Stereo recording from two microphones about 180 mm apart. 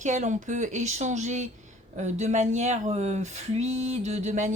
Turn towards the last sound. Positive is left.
turn(degrees=-40)  # may be behind; listen again after turning